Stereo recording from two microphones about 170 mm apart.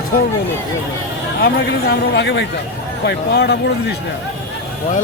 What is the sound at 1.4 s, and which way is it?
A man's voice, 80° left.